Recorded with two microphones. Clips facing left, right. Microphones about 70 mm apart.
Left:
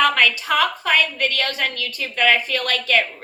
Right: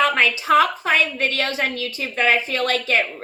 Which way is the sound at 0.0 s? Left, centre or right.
Right.